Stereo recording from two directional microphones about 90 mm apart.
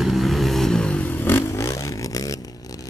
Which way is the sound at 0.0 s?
Centre (ahead or behind).